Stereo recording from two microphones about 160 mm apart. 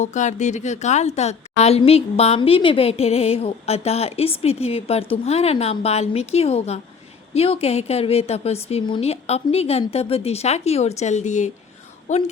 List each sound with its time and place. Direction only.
0.0 s a woman's voice: 50° left (ahead or behind)